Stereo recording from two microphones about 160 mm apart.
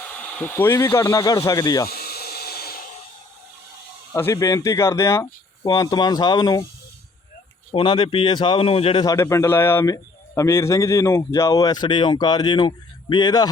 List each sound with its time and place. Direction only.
0.2 s a man's voice: 10° left (ahead or behind)
1.9 s a sound: 75° left (ahead or behind)
4.1 s a man's voice: 20° left (ahead or behind)
7.7 s speech: 35° left (ahead or behind)
9.0 s a man's voice: 20° left (ahead or behind)